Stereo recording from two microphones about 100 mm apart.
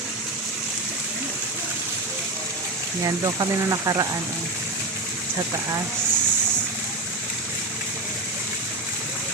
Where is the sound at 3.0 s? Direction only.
40° right (ahead or behind).